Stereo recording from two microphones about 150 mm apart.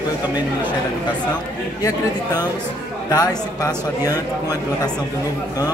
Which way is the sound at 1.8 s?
25° left (ahead or behind).